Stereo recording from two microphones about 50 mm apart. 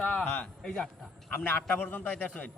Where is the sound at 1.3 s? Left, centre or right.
Left.